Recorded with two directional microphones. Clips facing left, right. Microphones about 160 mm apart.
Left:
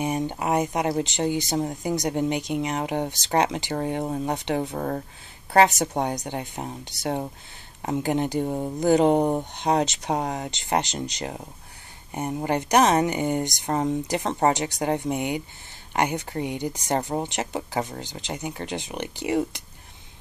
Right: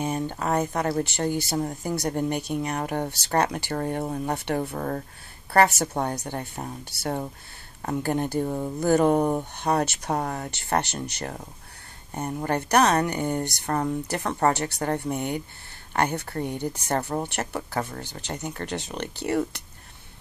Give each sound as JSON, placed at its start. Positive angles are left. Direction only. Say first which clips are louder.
{"t": 0.0, "sound": "speech", "louder": "left 2 dB", "side_deg": 15}